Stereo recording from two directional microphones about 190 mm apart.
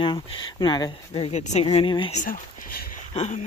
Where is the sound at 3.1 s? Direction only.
35° left (ahead or behind).